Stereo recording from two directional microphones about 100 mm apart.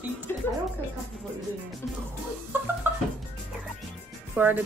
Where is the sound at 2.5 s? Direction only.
20° right (ahead or behind).